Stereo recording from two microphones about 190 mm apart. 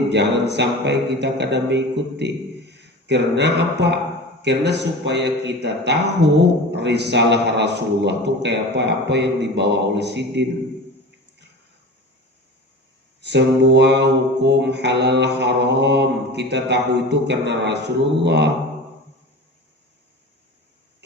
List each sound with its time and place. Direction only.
0.1 s a man's voice: 65° right (ahead or behind)
13.2 s a man's voice: 65° right (ahead or behind)